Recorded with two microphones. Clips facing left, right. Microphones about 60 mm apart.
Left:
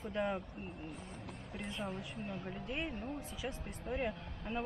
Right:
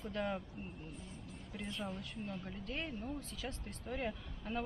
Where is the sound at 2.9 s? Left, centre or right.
Left.